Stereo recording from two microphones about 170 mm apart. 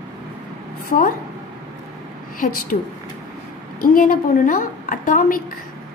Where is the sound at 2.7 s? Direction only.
50° left (ahead or behind).